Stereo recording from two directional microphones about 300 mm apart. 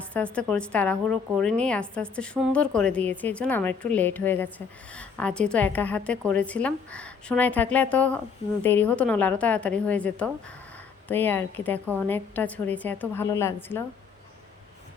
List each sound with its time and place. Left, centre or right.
0.1 s a woman's voice: centre